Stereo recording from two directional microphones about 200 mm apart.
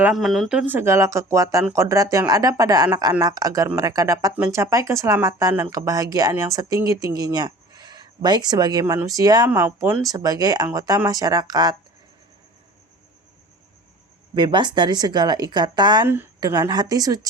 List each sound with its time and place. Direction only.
0.0 s a woman's voice: centre (ahead or behind); by 11.8 s 20° right (ahead or behind)
14.3 s a woman's voice: 25° right (ahead or behind)